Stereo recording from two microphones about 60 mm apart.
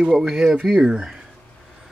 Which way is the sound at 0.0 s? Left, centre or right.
Centre.